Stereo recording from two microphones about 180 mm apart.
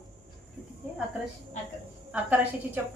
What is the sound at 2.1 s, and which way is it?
Speech, 10° right (ahead or behind).